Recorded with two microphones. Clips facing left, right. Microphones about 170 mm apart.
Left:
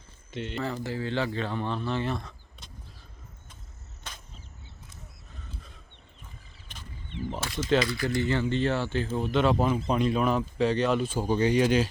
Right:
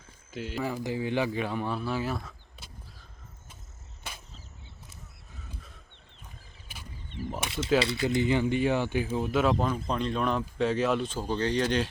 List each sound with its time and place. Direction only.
0.3 s speech: centre (ahead or behind)
4.1 s a sound: 10° right (ahead or behind)
6.7 s wild animals: 10° right (ahead or behind)
7.4 s speech: 25° right (ahead or behind); by 11.9 s 5° left (ahead or behind)